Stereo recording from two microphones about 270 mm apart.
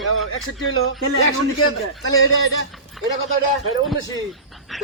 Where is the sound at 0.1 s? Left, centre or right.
Left.